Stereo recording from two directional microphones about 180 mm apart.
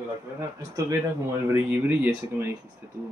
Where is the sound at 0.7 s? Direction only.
15° right (ahead or behind).